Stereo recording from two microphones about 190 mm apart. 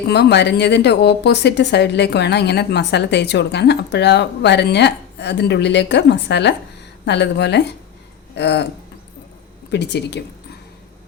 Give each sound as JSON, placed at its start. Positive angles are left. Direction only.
{"t": 0.1, "sound": "a woman's voice", "side_deg": 60}
{"t": 9.7, "sound": "a woman's voice", "side_deg": 65}